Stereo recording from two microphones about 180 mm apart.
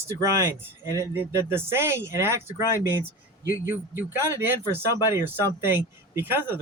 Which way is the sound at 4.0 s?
10° right (ahead or behind).